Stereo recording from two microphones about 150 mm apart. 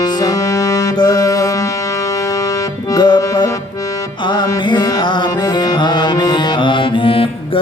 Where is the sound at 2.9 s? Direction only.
30° left (ahead or behind).